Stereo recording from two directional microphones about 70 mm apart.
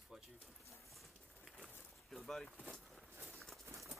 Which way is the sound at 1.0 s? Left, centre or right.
Centre.